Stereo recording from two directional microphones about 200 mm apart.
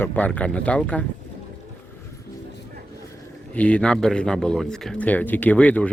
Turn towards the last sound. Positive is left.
turn(degrees=5)  # may be behind; listen again after turning